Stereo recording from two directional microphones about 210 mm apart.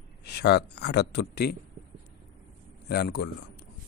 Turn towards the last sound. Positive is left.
turn(degrees=50)  # may be behind; listen again after turning